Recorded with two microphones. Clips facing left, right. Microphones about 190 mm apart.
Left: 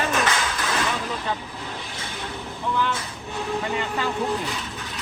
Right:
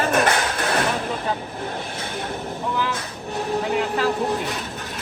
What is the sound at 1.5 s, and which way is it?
Speech, 50° right (ahead or behind).